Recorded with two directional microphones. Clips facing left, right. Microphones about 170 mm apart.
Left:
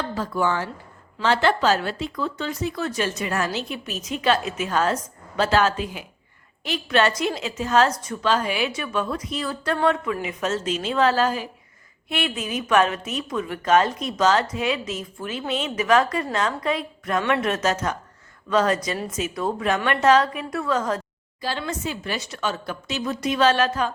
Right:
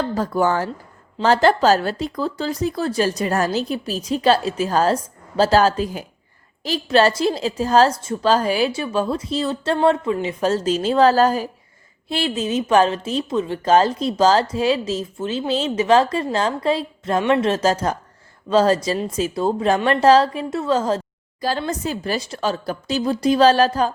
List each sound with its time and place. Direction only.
0.0 s a woman's voice: 40° right (ahead or behind)